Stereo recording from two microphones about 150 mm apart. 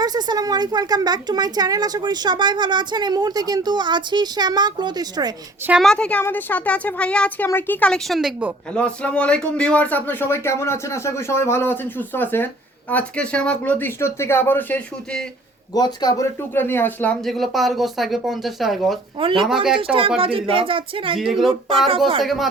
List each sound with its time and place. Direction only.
0.0 s a woman's voice: 25° right (ahead or behind)
5.8 s speech: 5° left (ahead or behind)
8.7 s speech: 10° left (ahead or behind)
15.7 s speech: 25° left (ahead or behind)
16.4 s speech: 15° left (ahead or behind)
19.2 s speech: 35° right (ahead or behind)
22.2 s speech: centre (ahead or behind)